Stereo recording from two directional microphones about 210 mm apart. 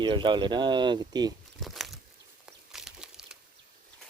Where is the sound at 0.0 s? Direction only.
20° right (ahead or behind).